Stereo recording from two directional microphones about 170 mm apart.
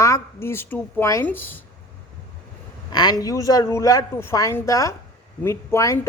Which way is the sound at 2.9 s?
25° left (ahead or behind).